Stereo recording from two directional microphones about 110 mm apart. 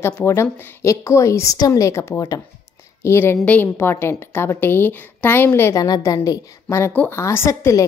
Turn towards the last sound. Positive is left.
turn(degrees=30)  # may be behind; listen again after turning